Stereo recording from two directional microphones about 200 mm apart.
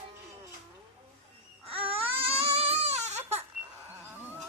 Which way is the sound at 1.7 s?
30° right (ahead or behind).